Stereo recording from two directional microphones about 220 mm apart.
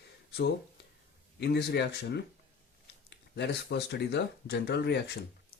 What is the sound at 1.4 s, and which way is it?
Speech, 50° left (ahead or behind).